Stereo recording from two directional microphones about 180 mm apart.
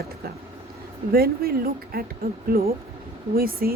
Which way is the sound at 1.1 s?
55° right (ahead or behind).